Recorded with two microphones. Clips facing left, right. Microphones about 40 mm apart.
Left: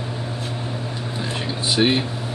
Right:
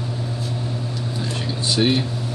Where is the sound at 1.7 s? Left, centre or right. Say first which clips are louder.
Left 1 dB; centre.